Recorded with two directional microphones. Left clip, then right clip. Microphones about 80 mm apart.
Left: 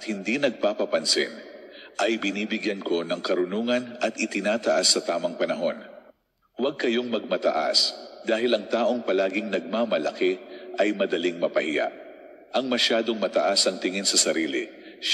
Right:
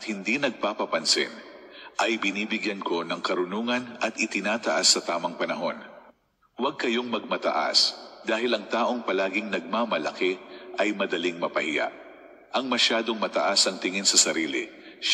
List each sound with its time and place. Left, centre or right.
0.0 s a man's voice: left